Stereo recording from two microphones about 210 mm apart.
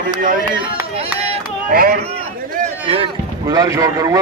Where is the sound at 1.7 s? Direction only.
45° right (ahead or behind).